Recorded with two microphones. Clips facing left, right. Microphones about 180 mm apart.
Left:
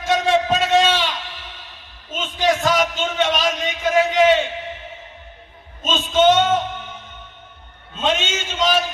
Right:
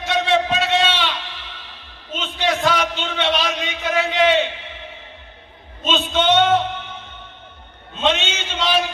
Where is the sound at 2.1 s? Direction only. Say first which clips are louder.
Left 2 dB; 45° left (ahead or behind).